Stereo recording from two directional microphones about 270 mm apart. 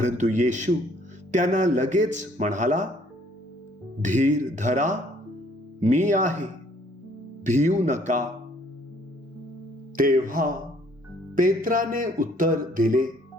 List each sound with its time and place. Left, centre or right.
0.0 s a man's voice: right
4.0 s a man's voice: right
9.9 s a sound: right